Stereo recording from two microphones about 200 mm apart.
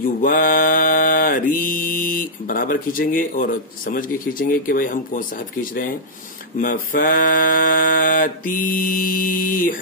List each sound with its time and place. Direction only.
0.0 s mantra: 45° left (ahead or behind)